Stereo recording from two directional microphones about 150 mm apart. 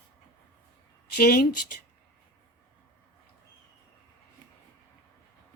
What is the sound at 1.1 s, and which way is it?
Speech, 85° left.